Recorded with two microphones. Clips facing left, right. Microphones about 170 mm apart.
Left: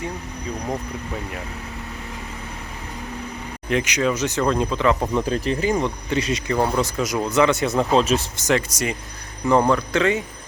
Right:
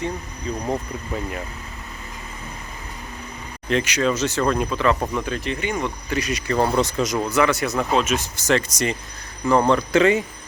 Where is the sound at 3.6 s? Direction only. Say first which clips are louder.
Even; 15° left (ahead or behind).